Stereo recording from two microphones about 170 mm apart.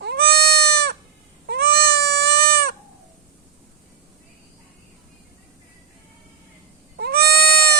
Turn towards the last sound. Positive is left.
turn(degrees=-65)  # may be behind; listen again after turning